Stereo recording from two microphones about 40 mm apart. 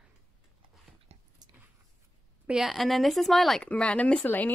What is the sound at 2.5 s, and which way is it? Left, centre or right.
Speech, centre.